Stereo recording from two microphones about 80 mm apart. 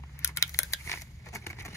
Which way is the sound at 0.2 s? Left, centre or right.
Left.